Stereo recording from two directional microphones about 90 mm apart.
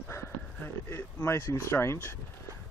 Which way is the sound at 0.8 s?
30° left (ahead or behind).